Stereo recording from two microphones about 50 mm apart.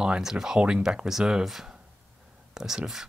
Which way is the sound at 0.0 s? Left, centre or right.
Centre.